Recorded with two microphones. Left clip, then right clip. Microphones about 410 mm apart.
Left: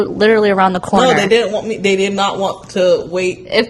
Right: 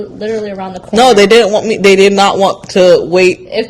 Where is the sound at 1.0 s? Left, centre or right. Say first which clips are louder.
Right 8 dB; right.